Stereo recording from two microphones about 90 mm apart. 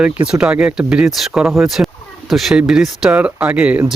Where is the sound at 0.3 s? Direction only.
10° right (ahead or behind).